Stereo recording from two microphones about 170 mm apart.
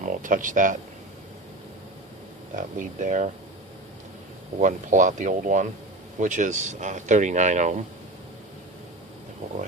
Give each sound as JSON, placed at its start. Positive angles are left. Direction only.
{"t": 0.0, "sound": "speech", "side_deg": -50}
{"t": 2.6, "sound": "speech", "side_deg": -50}
{"t": 4.6, "sound": "speech", "side_deg": -50}